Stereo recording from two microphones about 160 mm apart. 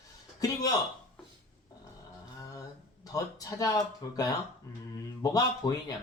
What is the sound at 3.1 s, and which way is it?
Speech, 20° left (ahead or behind).